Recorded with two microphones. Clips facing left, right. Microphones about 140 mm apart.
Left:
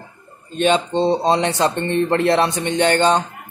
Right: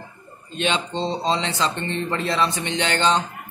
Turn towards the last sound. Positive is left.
turn(degrees=50)  # may be behind; listen again after turning